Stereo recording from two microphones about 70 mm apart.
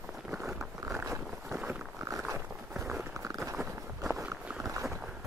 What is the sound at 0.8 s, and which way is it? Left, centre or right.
Boat, right.